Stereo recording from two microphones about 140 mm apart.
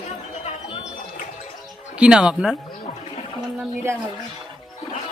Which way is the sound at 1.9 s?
5° right (ahead or behind).